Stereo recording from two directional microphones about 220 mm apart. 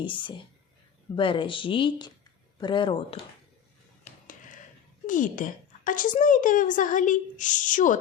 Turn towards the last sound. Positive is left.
turn(degrees=35)  # may be behind; listen again after turning